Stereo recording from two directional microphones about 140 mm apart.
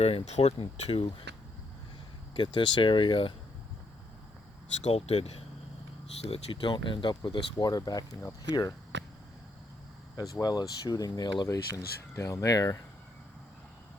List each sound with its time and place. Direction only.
0.0 s speech: 45° left (ahead or behind)
2.3 s speech: 35° left (ahead or behind)
4.8 s speech: 50° left (ahead or behind); by 8.7 s 25° left (ahead or behind)
10.4 s speech: 25° left (ahead or behind)